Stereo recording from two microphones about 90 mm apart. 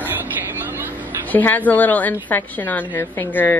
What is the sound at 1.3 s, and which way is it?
A woman's voice, 20° left (ahead or behind).